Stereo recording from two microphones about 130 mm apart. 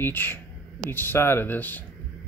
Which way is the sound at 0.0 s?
15° left (ahead or behind).